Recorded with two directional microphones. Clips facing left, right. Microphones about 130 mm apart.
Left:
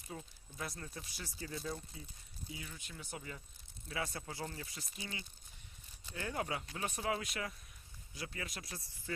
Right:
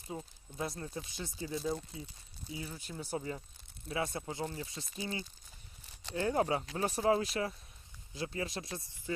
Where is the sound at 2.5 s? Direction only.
30° right (ahead or behind).